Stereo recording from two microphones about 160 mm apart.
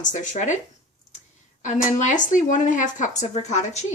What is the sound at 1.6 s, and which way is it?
A woman's voice, 50° left (ahead or behind).